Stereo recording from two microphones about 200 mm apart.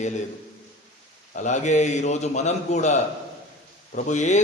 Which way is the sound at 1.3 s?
40° left (ahead or behind).